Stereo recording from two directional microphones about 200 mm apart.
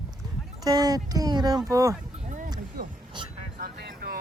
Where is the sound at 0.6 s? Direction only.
20° right (ahead or behind).